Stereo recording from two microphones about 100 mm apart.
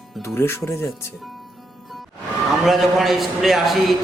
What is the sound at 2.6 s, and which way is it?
A man's voice, centre (ahead or behind).